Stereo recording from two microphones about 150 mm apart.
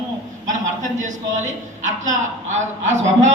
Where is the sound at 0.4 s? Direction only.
55° right (ahead or behind).